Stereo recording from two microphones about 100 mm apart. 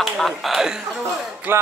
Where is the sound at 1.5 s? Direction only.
25° right (ahead or behind).